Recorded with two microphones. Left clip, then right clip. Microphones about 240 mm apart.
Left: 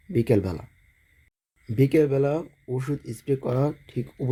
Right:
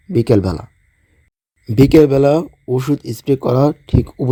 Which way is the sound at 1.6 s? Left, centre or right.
Right.